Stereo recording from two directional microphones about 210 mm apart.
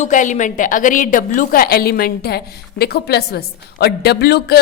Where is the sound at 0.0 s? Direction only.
35° left (ahead or behind).